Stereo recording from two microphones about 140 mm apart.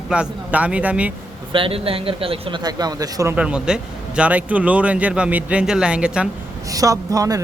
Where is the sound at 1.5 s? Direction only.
40° right (ahead or behind).